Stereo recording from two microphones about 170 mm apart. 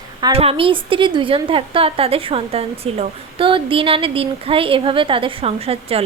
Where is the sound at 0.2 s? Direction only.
25° right (ahead or behind).